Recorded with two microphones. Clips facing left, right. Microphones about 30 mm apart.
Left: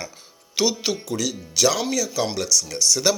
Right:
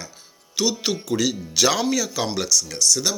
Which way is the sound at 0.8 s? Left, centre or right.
Centre.